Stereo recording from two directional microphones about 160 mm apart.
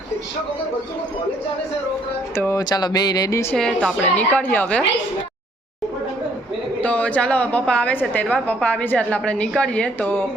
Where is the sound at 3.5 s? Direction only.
5° left (ahead or behind).